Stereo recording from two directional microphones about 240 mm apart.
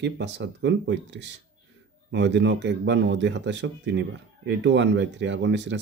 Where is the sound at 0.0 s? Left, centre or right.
Right.